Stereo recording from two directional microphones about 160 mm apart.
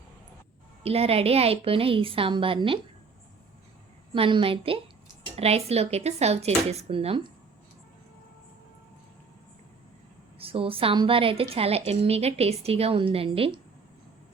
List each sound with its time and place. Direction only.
0.8 s a woman's voice: 40° right (ahead or behind)
4.1 s a woman's voice: 30° right (ahead or behind)
10.3 s a woman's voice: 35° right (ahead or behind)